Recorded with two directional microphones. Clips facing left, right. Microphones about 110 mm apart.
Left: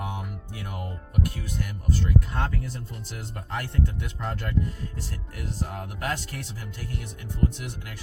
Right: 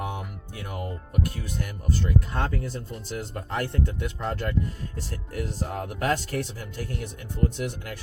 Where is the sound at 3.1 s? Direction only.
40° right (ahead or behind).